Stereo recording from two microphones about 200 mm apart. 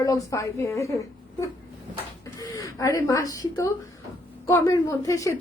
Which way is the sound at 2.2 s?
15° left (ahead or behind).